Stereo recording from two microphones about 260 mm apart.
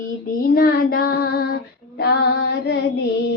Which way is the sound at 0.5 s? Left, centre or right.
Left.